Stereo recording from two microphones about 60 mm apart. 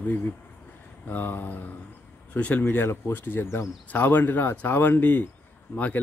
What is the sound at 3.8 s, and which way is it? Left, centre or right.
Speech, left.